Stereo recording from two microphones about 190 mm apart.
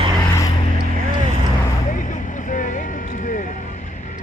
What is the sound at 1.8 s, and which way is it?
Vehicle, 40° left (ahead or behind).